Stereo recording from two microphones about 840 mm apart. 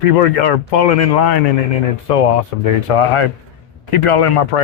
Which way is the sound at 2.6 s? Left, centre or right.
Left.